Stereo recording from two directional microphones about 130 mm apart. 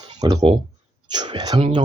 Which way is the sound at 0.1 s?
30° right (ahead or behind).